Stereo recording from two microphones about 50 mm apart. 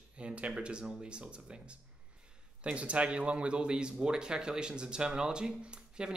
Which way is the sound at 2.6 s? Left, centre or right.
Right.